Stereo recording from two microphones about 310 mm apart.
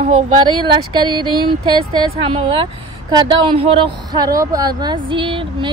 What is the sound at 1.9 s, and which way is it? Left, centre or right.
A woman's voice, centre.